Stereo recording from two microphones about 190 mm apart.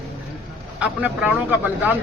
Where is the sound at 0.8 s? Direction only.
10° right (ahead or behind).